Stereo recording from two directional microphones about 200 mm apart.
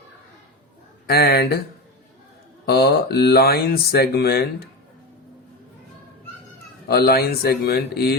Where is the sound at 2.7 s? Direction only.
55° left (ahead or behind).